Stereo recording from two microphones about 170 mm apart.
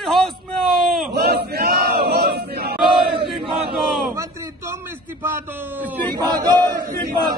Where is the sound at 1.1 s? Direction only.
70° right (ahead or behind).